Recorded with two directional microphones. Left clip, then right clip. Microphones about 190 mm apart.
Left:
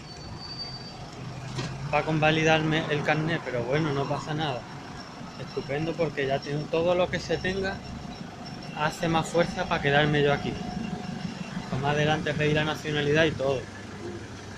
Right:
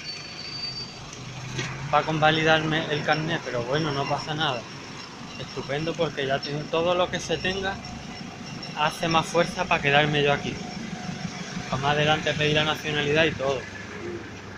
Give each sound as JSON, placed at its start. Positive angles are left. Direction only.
{"t": 1.9, "sound": "speech", "side_deg": 15}
{"t": 5.7, "sound": "speech", "side_deg": 5}
{"t": 8.7, "sound": "speech", "side_deg": 15}
{"t": 11.8, "sound": "speech", "side_deg": 10}